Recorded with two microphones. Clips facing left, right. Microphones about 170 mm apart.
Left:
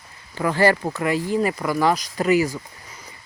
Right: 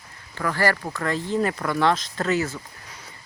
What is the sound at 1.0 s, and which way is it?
Speech, 10° left (ahead or behind).